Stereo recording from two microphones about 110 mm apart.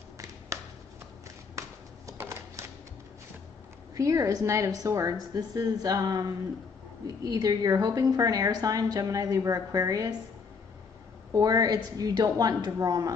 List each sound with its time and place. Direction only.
0.5 s a sound: 30° right (ahead or behind)
3.9 s a woman's voice: 30° right (ahead or behind)
11.3 s a woman's voice: 35° right (ahead or behind)